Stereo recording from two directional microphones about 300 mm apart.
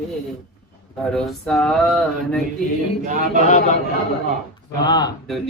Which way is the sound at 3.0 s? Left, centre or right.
Right.